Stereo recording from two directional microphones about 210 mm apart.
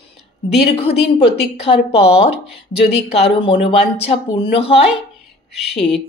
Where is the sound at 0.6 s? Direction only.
30° left (ahead or behind).